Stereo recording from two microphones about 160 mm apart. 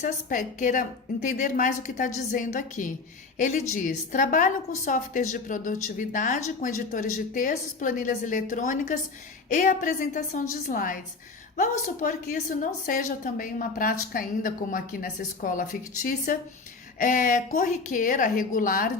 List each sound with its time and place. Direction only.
0.0 s a woman's voice: 50° left (ahead or behind)